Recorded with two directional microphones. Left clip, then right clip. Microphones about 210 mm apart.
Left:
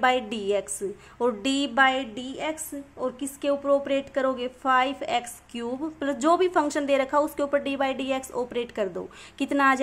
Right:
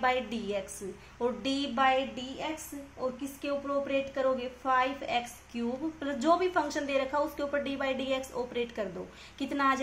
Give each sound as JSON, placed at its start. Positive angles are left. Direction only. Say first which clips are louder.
{"t": 0.0, "sound": "a woman's voice", "louder": "left 6 dB", "side_deg": 45}